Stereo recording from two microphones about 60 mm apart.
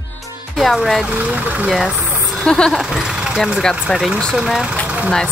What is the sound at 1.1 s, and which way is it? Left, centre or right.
Speech, right.